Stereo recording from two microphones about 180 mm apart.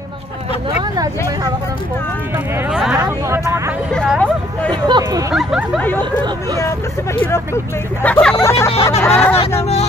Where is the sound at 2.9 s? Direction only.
15° right (ahead or behind).